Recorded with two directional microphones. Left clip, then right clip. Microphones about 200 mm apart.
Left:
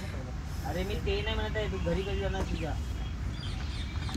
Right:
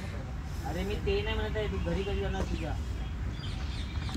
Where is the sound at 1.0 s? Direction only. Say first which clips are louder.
Right 3 dB; 50° left (ahead or behind).